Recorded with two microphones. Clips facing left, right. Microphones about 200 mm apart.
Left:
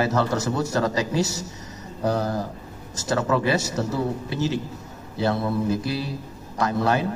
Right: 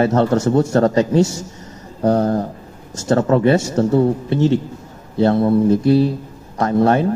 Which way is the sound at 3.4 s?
30° right (ahead or behind).